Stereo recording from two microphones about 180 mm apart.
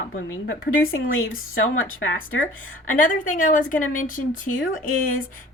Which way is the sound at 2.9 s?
50° left (ahead or behind).